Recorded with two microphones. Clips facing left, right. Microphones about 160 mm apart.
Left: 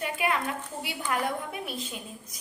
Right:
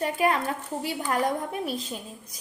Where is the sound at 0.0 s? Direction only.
35° right (ahead or behind).